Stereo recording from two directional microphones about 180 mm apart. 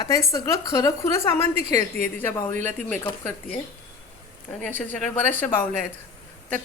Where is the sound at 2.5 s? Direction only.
45° right (ahead or behind).